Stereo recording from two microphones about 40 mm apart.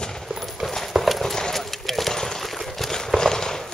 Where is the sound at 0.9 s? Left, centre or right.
Centre.